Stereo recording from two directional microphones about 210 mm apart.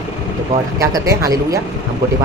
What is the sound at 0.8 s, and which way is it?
Speech, 15° right (ahead or behind).